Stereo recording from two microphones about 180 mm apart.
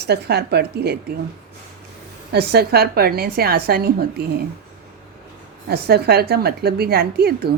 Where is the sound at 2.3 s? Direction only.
60° right (ahead or behind).